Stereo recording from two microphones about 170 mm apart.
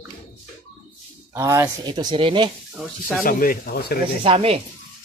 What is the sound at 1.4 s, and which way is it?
Speech, 15° right (ahead or behind).